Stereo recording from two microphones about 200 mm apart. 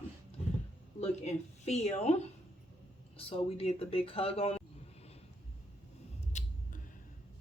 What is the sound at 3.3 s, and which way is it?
Speech, 30° left (ahead or behind).